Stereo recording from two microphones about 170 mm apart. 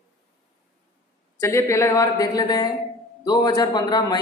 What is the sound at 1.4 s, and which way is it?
A woman's voice, 15° left (ahead or behind).